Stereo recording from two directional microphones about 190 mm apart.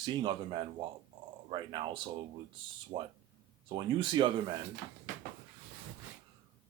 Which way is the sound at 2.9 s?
25° right (ahead or behind).